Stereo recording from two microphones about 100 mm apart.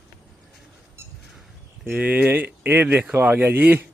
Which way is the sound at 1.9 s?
15° right (ahead or behind).